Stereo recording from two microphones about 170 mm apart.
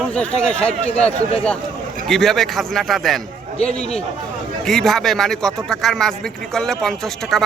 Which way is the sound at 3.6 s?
40° left (ahead or behind).